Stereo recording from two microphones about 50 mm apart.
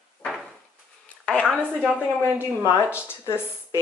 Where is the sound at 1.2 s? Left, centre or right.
Left.